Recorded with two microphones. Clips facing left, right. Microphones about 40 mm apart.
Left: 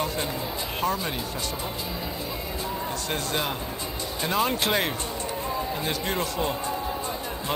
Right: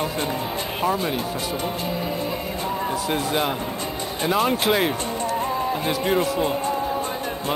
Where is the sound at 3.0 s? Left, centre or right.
Centre.